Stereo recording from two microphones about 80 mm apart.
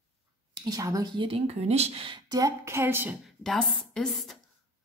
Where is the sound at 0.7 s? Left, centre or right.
Right.